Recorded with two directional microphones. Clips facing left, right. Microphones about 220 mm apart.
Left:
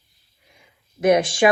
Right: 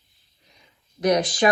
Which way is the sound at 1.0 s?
25° left (ahead or behind).